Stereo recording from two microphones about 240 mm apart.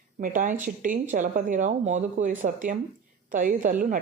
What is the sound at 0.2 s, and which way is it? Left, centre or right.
Speech, right.